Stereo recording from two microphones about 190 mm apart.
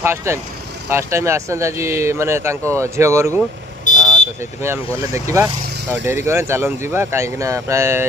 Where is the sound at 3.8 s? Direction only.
40° left (ahead or behind).